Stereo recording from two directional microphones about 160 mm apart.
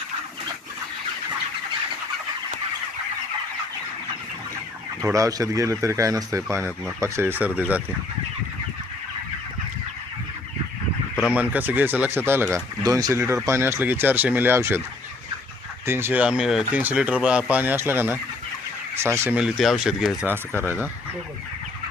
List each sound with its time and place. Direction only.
5.0 s speech: 20° right (ahead or behind)
11.2 s speech: 10° right (ahead or behind)
15.9 s speech: 15° right (ahead or behind)